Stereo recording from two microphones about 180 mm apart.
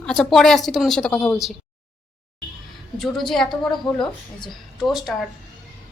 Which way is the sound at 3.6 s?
25° left (ahead or behind).